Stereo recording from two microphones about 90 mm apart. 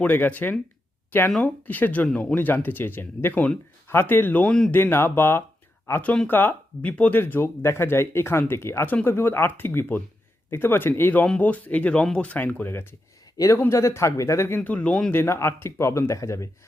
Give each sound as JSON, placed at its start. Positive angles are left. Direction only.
{"t": 0.0, "sound": "speech", "side_deg": 20}
{"t": 4.7, "sound": "speech", "side_deg": 25}
{"t": 13.3, "sound": "speech", "side_deg": 40}
{"t": 15.1, "sound": "speech", "side_deg": 30}